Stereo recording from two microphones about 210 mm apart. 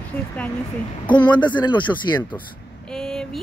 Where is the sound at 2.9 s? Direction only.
Centre (ahead or behind).